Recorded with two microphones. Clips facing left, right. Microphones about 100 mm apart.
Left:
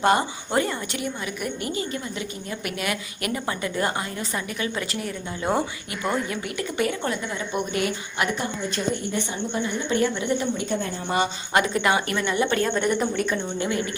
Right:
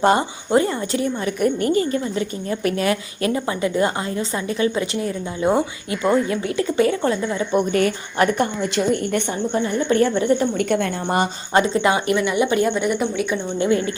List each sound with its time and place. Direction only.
0.0 s a woman's voice: 25° right (ahead or behind)
1.2 s a woman's voice: 45° right (ahead or behind); by 7.4 s 30° right (ahead or behind)
7.5 s a woman's voice: 45° right (ahead or behind)
9.5 s a woman's voice: 45° right (ahead or behind)
11.5 s a woman's voice: 25° right (ahead or behind); by 13.2 s 5° right (ahead or behind)
13.6 s a woman's voice: 30° right (ahead or behind)